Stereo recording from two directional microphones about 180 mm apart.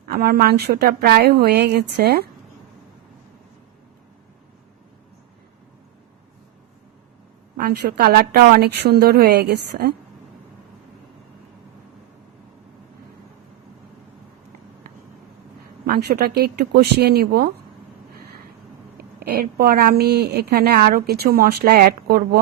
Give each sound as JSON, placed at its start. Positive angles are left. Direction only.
{"t": 0.1, "sound": "a woman's voice", "side_deg": -55}
{"t": 7.5, "sound": "a woman's voice", "side_deg": -60}
{"t": 15.9, "sound": "a woman's voice", "side_deg": -65}
{"t": 18.1, "sound": "a sound", "side_deg": -55}
{"t": 18.9, "sound": "a woman's voice", "side_deg": -60}